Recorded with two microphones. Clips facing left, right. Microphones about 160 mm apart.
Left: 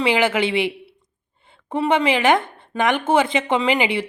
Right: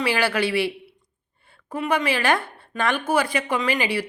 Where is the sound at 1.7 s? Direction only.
30° left (ahead or behind).